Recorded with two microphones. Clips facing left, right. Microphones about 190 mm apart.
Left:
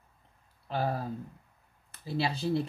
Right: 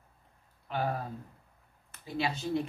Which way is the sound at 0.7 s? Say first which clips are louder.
Left 1 dB; 35° left (ahead or behind).